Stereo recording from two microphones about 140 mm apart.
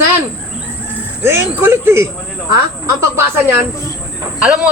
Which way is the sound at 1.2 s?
15° right (ahead or behind).